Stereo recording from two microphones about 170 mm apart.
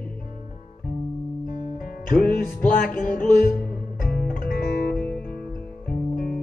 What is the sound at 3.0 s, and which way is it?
Music, 55° left (ahead or behind).